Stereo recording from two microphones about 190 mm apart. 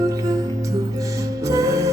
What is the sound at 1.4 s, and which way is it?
Music, 15° right (ahead or behind).